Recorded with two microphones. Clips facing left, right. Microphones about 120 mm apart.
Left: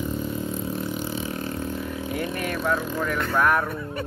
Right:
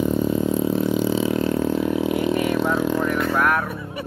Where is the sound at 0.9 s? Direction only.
90° right.